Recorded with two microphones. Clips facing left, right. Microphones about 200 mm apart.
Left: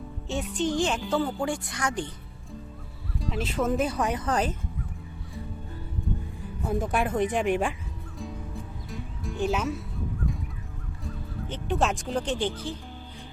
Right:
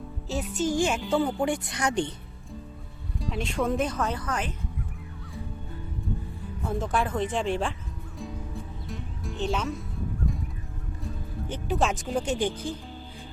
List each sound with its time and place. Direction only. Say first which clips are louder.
0.3 s speech: even; centre (ahead or behind)
1.4 s speech: right 2 dB; 20° right (ahead or behind)
3.2 s speech: even; centre (ahead or behind)
3.9 s speech: left 2 dB; 15° left (ahead or behind)
4.3 s speech: left 5 dB; 35° left (ahead or behind)
6.7 s speech: left 1 dB; 15° left (ahead or behind)
8.2 s music: even; centre (ahead or behind)
11.4 s speech: even; 10° right (ahead or behind)
11.8 s speech: even; centre (ahead or behind)